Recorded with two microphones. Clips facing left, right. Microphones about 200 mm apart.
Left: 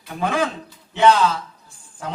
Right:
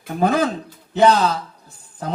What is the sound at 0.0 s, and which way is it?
Speech, 40° right (ahead or behind).